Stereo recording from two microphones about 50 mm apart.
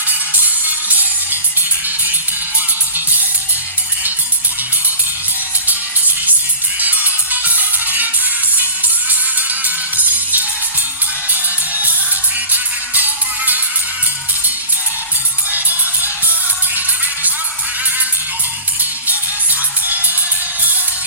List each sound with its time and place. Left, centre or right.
0.6 s music: right
2.9 s music: right
6.7 s music: right
9.6 s music: right
15.5 s music: right
19.0 s music: right